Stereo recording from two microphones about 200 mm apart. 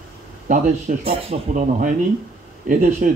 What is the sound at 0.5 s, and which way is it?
A man's voice, 35° right (ahead or behind).